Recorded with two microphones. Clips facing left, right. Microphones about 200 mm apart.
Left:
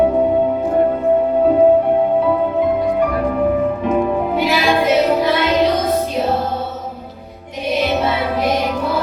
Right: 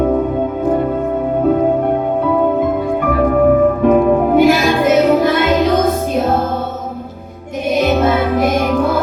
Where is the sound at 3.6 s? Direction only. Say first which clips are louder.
Right 6 dB; 50° right (ahead or behind).